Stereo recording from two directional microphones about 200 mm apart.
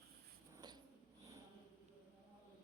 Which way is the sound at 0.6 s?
20° right (ahead or behind).